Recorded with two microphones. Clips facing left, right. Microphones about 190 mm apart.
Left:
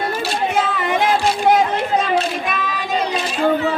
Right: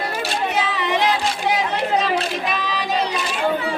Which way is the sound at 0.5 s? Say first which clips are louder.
Left 2 dB; 50° left (ahead or behind).